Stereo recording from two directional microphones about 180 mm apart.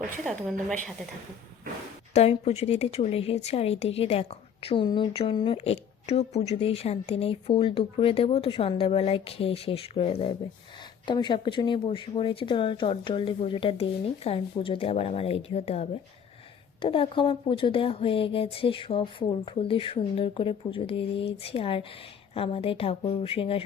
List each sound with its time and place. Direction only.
2.1 s a woman's voice: 35° left (ahead or behind)